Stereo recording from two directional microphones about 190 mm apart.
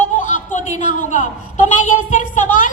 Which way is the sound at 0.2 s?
40° left (ahead or behind).